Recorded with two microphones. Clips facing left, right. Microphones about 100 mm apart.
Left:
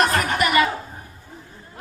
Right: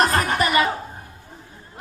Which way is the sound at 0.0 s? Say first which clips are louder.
Even; 35° right (ahead or behind).